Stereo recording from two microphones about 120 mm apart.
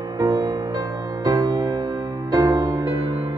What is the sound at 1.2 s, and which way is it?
Music, 35° right (ahead or behind).